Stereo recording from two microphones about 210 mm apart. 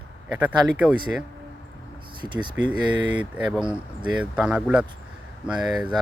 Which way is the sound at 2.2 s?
20° right (ahead or behind).